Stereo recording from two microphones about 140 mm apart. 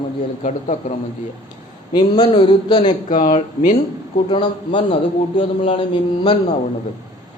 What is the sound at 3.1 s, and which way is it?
Speech, 65° left (ahead or behind).